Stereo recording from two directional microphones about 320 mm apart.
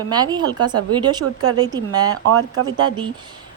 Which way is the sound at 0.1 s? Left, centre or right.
Centre.